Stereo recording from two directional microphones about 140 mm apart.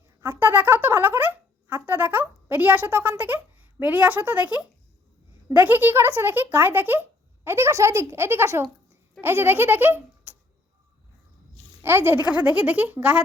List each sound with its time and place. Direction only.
0.2 s a sound: 15° right (ahead or behind)
5.5 s speech: 15° right (ahead or behind)
11.8 s speech: 15° right (ahead or behind)